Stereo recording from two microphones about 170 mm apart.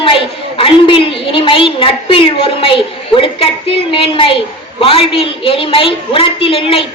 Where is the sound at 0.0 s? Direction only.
30° left (ahead or behind).